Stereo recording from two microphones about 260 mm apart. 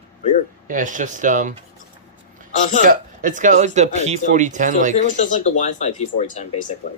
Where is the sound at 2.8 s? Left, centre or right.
Right.